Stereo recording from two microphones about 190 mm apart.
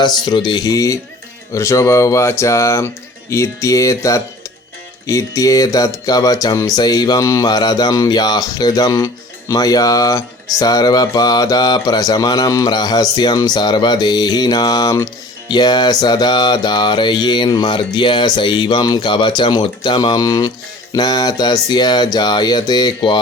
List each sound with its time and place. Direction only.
0.0 s speech: 20° left (ahead or behind)